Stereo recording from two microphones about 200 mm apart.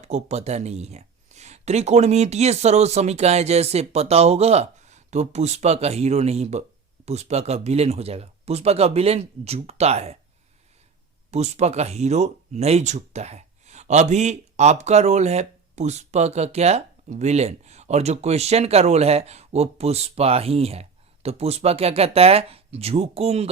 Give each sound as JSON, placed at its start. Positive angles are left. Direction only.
{"t": 0.0, "sound": "speech", "side_deg": -35}
{"t": 11.3, "sound": "speech", "side_deg": -35}